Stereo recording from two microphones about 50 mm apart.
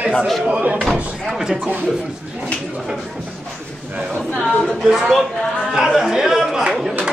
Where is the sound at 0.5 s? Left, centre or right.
Right.